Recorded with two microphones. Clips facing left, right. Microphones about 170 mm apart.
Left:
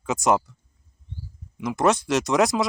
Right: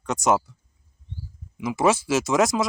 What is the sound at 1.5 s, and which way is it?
Speech, 5° right (ahead or behind).